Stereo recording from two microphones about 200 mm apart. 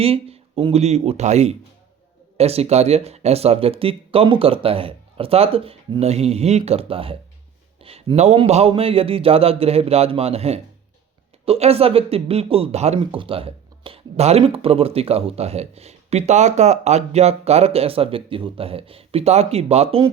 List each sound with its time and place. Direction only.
0.0 s speech: 30° right (ahead or behind)